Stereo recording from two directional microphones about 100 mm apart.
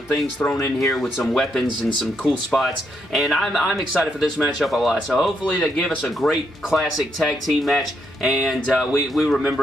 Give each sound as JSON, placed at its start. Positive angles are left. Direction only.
{"t": 0.6, "sound": "speech", "side_deg": 30}
{"t": 0.8, "sound": "speech", "side_deg": 0}
{"t": 5.4, "sound": "speech", "side_deg": 10}